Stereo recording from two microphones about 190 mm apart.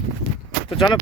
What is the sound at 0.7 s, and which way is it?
Speech, 25° left (ahead or behind).